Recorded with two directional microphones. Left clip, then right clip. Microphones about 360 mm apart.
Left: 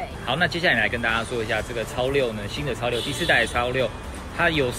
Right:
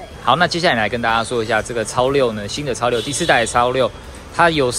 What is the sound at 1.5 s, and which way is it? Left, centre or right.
Speech, right.